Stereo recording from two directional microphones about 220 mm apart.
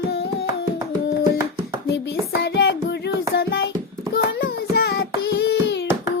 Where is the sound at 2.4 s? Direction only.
50° left (ahead or behind).